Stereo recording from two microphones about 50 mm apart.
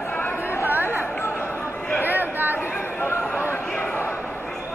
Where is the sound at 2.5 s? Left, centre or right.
Left.